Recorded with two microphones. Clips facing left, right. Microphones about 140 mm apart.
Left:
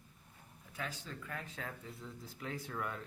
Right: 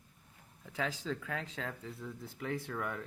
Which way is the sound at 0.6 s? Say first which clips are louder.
Right 7 dB; 90° right.